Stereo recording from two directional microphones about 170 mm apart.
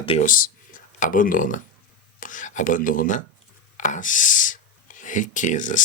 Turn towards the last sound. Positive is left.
turn(degrees=50)  # may be behind; listen again after turning